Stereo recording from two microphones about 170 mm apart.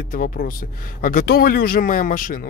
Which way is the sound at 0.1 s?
55° left (ahead or behind).